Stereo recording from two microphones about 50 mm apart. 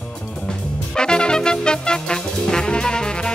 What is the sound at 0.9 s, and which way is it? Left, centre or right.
Music, centre.